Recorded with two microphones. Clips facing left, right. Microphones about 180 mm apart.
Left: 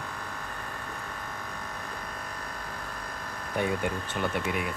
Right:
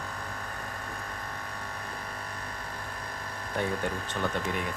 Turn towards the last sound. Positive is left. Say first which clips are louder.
# left 1 dB
turn(degrees=10)  # may be behind; listen again after turning